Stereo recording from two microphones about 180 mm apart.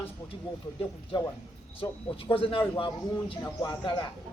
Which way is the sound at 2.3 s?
30° left (ahead or behind).